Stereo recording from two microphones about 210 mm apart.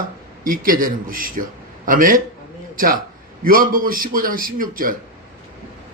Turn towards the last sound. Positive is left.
turn(degrees=-40)  # may be behind; listen again after turning